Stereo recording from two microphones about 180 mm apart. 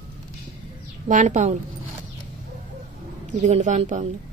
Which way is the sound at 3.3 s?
40° right (ahead or behind).